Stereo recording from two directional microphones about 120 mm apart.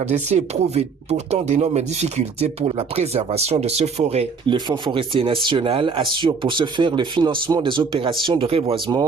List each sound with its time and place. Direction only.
0.0 s speech: 65° right (ahead or behind)
4.5 s speech: 40° right (ahead or behind)